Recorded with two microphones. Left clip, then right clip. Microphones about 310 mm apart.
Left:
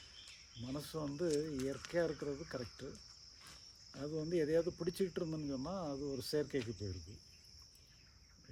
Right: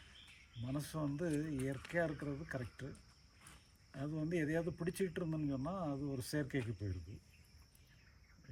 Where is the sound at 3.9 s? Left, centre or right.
Centre.